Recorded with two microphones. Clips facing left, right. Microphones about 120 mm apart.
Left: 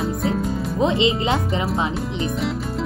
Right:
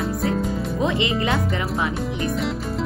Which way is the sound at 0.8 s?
20° left (ahead or behind).